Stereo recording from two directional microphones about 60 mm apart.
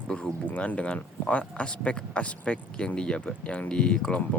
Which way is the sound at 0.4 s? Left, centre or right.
Left.